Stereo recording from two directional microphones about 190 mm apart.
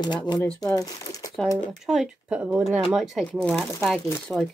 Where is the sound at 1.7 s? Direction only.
5° right (ahead or behind).